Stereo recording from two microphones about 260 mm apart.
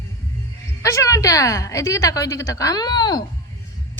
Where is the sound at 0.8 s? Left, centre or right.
Centre.